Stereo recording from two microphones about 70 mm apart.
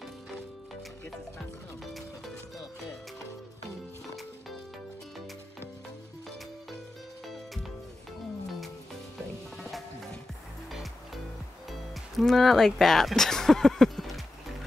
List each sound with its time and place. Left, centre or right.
9.6 s music: centre
11.7 s music: centre